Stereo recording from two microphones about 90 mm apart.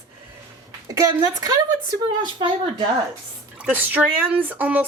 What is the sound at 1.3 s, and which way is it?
Speech, 45° right (ahead or behind).